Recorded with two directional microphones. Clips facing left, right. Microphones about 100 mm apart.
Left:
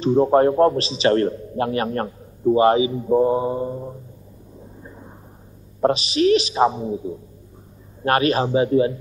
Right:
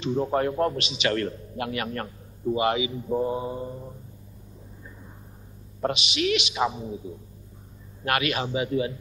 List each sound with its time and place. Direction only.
0.0 s a man's voice: 35° left (ahead or behind)
4.8 s a sound: 35° left (ahead or behind)
5.8 s a man's voice: 35° left (ahead or behind)